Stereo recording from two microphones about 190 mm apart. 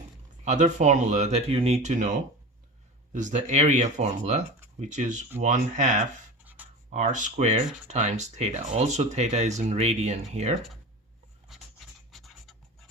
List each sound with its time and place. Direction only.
0.4 s speech: 40° right (ahead or behind)
6.4 s writing: 10° right (ahead or behind)
6.9 s speech: 40° right (ahead or behind)
11.4 s scratch: centre (ahead or behind)